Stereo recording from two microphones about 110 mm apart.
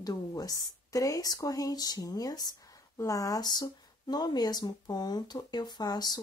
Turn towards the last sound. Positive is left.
turn(degrees=35)  # may be behind; listen again after turning